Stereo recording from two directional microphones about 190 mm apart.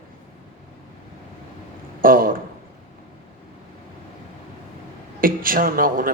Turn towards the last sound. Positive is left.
turn(degrees=-50)  # may be behind; listen again after turning